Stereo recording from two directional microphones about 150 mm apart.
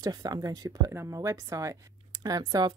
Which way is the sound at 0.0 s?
25° right (ahead or behind).